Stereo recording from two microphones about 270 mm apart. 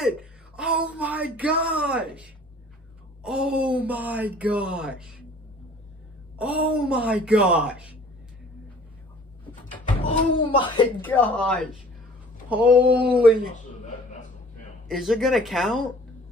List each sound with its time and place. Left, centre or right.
0.0 s speech: centre
6.3 s speech: centre
10.0 s speech: centre
11.1 s speech: centre
14.9 s speech: centre